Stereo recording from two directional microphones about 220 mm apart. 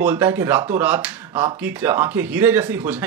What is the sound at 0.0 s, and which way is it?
Speech, 5° right (ahead or behind).